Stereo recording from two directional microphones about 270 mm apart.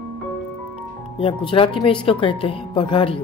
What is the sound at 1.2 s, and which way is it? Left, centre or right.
Speech, centre.